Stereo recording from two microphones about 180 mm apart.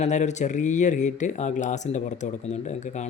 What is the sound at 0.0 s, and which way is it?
Speech, 40° left (ahead or behind).